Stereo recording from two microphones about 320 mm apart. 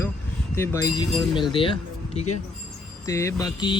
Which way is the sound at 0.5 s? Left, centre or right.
Centre.